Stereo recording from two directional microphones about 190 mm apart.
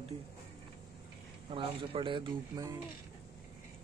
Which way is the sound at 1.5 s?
25° right (ahead or behind).